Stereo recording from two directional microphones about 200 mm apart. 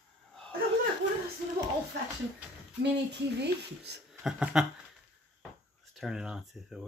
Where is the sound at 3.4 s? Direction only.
55° right (ahead or behind).